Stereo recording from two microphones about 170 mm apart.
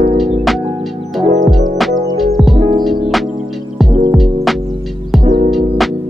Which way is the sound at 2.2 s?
Centre (ahead or behind).